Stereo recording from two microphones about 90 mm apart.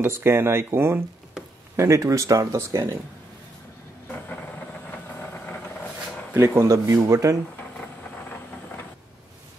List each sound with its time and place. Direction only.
0.0 s speech: 25° right (ahead or behind)
6.3 s speech: 30° right (ahead or behind)